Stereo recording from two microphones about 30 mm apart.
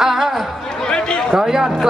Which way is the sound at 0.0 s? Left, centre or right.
Centre.